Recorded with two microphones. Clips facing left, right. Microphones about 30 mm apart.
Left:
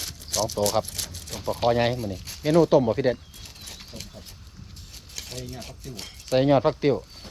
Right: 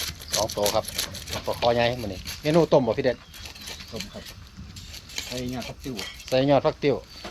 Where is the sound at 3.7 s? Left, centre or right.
Right.